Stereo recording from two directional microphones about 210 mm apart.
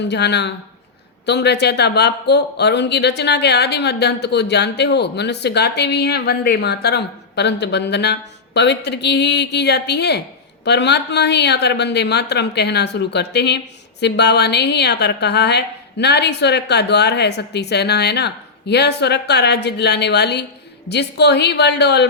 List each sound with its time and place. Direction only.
0.1 s speech: 55° left (ahead or behind)